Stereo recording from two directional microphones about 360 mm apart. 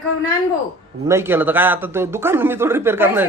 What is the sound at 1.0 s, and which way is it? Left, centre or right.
Speech, centre.